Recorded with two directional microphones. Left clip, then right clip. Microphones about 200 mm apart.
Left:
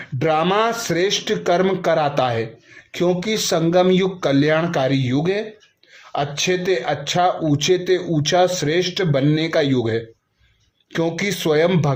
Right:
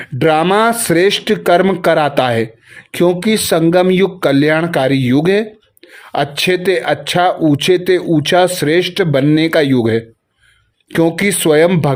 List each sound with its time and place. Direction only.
0.0 s speech: 40° right (ahead or behind)